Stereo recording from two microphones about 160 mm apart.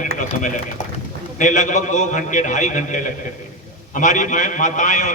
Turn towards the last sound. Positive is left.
turn(degrees=50)  # may be behind; listen again after turning